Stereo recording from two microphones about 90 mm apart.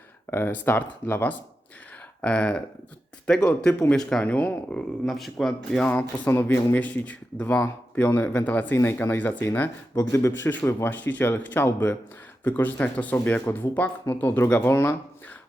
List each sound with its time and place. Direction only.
0.3 s speech: 25° left (ahead or behind)
2.2 s speech: 10° left (ahead or behind)
5.0 s speech: centre (ahead or behind)
5.8 s speech: 20° left (ahead or behind)
9.9 s speech: 35° left (ahead or behind)